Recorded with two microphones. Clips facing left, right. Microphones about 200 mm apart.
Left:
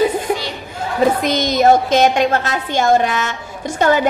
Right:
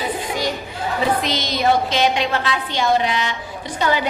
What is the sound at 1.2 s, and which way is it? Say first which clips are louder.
A woman's voice: left 6 dB; 50° left (ahead or behind).